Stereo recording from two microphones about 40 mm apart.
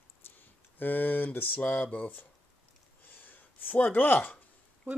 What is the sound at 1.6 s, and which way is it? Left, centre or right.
Speech, left.